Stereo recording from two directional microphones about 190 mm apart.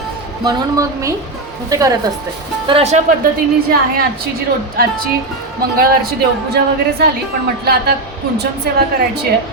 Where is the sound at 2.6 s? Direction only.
30° right (ahead or behind).